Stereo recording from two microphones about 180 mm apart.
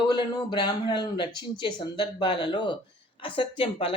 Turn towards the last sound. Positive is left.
turn(degrees=30)  # may be behind; listen again after turning